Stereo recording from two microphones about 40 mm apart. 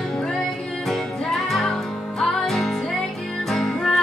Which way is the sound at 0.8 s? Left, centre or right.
Centre.